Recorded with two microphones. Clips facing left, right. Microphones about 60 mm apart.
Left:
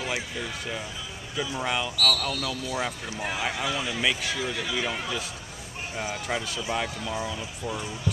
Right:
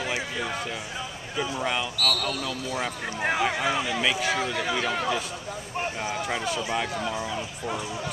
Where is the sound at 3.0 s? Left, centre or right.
Right.